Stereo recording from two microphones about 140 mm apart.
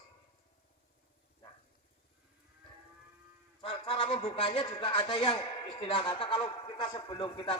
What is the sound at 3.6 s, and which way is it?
A man's voice, 40° left (ahead or behind).